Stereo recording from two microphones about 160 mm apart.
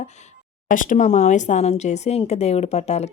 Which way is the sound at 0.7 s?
55° left (ahead or behind).